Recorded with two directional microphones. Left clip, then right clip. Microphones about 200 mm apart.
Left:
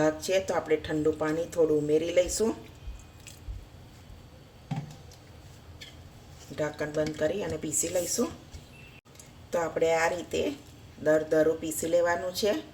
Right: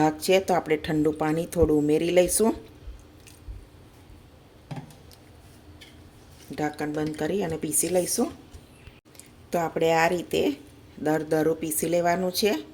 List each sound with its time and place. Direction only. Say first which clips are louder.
0.0 s speech: right 4 dB; 45° right (ahead or behind)
6.6 s speech: right 1 dB; 40° right (ahead or behind)
9.5 s speech: right 3 dB; 45° right (ahead or behind)